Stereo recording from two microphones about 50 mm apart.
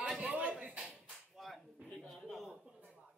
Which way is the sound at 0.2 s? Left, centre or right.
Centre.